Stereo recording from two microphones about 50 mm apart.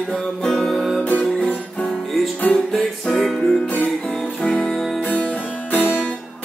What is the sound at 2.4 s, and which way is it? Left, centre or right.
Music, left.